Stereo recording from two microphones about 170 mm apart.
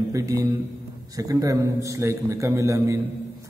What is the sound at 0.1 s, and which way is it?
A man's voice, 20° right (ahead or behind).